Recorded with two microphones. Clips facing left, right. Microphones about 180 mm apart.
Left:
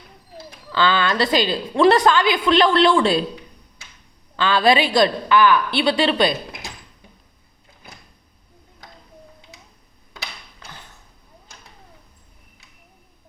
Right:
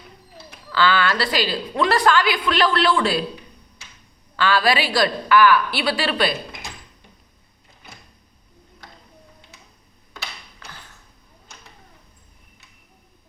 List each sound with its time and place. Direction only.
0.7 s a woman's voice: 20° left (ahead or behind)
4.4 s a woman's voice: 20° left (ahead or behind)